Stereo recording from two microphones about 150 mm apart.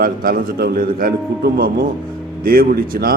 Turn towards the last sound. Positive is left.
turn(degrees=-85)